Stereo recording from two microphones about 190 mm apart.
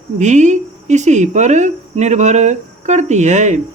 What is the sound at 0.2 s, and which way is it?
Speech, 40° right (ahead or behind).